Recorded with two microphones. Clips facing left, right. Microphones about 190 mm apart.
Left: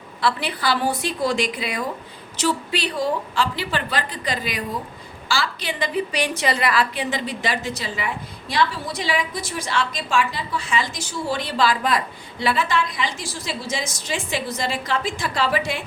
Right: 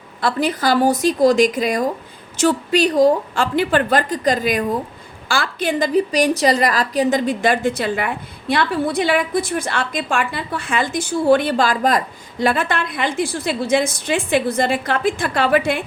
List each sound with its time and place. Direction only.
0.2 s a woman's voice: 45° right (ahead or behind)